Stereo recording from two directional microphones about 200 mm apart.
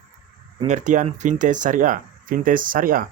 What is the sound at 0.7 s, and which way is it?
Speech, 35° right (ahead or behind).